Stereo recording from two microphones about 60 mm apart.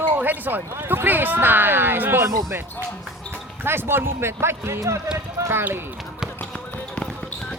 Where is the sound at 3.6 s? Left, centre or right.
Right.